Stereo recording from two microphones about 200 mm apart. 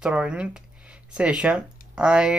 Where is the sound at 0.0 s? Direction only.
5° right (ahead or behind).